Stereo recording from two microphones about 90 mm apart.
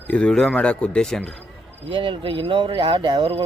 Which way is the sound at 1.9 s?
70° right (ahead or behind).